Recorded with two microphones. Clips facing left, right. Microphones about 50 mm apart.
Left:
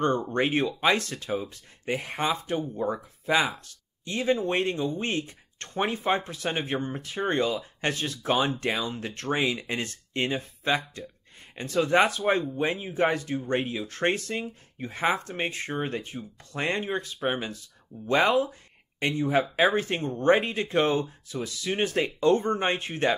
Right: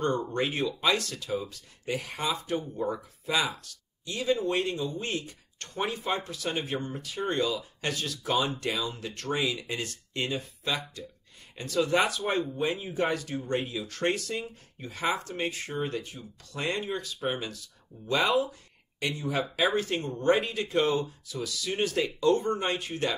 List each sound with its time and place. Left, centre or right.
0.0 s speech: left
2.5 s speech: left